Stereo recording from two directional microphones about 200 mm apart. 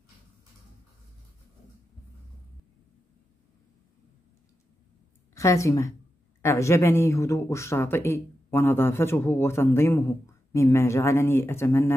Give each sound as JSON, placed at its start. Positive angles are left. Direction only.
{"t": 5.3, "sound": "a woman's voice", "side_deg": 15}